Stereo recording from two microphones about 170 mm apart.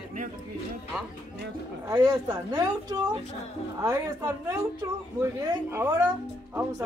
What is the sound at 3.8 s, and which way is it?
Speech, 15° right (ahead or behind).